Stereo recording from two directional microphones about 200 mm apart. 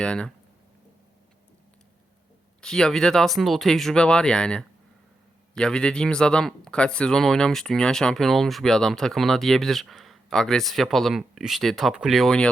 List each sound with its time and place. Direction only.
0.0 s speech: 5° left (ahead or behind)
2.6 s speech: 5° left (ahead or behind)